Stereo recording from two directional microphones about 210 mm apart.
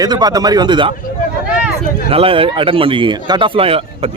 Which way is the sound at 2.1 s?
25° right (ahead or behind).